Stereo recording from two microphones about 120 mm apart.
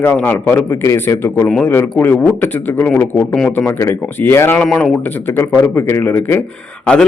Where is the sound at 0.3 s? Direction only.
15° left (ahead or behind).